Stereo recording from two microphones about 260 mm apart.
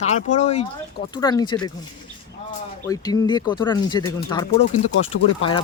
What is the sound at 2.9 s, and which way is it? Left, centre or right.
Speech, centre.